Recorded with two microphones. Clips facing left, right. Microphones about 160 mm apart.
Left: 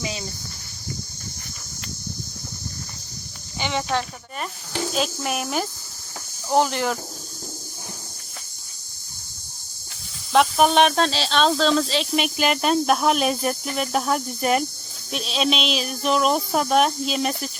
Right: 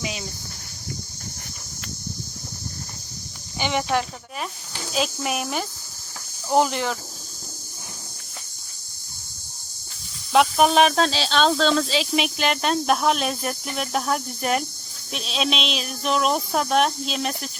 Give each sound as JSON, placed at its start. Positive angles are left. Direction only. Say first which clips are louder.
{"t": 0.0, "sound": "speech", "louder": "left 1 dB", "side_deg": -5}
{"t": 3.6, "sound": "speech", "louder": "right 2 dB", "side_deg": -15}
{"t": 4.9, "sound": "speech", "louder": "right 3 dB", "side_deg": 0}
{"t": 10.3, "sound": "speech", "louder": "even", "side_deg": 0}